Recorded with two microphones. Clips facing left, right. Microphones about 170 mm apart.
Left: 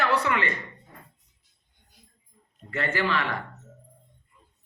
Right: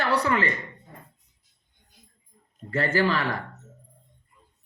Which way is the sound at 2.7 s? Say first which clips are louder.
Right 3 dB; 35° right (ahead or behind).